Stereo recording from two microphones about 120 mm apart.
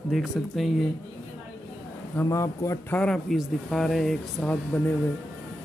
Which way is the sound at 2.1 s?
25° left (ahead or behind).